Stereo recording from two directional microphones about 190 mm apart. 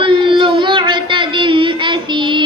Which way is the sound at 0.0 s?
25° right (ahead or behind).